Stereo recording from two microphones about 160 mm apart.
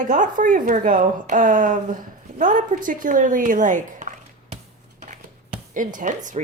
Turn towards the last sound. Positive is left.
turn(degrees=-50)  # may be behind; listen again after turning